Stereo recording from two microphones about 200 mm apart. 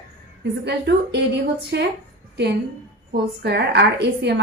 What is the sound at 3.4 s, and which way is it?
Speech, 55° right (ahead or behind).